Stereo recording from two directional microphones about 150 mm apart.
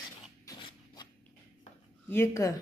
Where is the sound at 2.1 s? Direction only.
20° left (ahead or behind).